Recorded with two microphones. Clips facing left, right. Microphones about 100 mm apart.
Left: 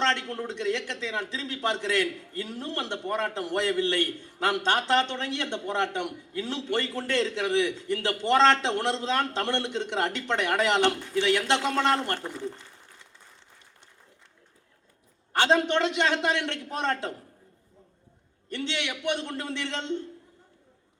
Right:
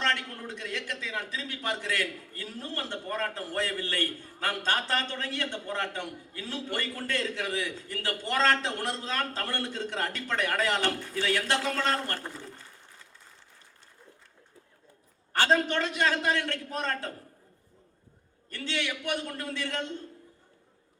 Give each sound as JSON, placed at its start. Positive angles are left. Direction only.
{"t": 0.0, "sound": "a man's voice", "side_deg": 25}
{"t": 15.3, "sound": "a man's voice", "side_deg": 25}
{"t": 18.5, "sound": "a man's voice", "side_deg": 25}